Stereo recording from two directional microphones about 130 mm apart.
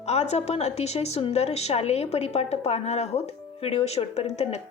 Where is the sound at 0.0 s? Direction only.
55° left (ahead or behind).